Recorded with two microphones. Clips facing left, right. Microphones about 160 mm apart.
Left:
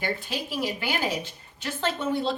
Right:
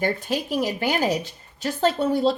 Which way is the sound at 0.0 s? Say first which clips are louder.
Right 6 dB; 45° right (ahead or behind).